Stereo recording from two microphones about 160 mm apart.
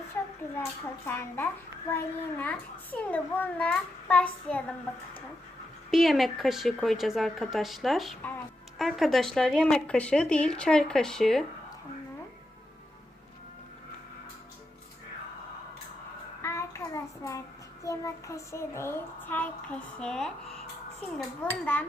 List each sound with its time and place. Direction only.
1.0 s a child's voice: 15° left (ahead or behind)
5.9 s speech: centre (ahead or behind)
16.4 s child singing: 15° left (ahead or behind)
17.8 s a child's voice: 20° left (ahead or behind)